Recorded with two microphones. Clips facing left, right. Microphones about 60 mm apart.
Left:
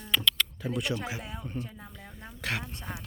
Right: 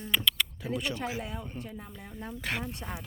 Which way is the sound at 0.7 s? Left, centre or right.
Centre.